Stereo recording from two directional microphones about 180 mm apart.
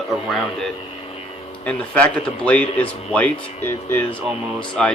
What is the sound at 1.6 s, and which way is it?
Speech, 5° left (ahead or behind).